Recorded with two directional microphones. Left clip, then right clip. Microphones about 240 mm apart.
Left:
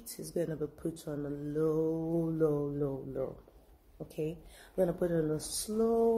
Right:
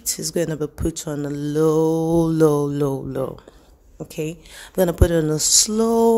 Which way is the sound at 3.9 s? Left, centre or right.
Right.